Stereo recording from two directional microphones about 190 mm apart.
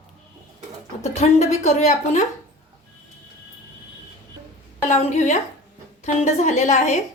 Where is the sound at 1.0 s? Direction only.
35° left (ahead or behind).